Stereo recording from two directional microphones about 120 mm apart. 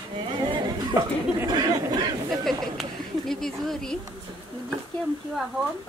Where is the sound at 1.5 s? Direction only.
35° right (ahead or behind).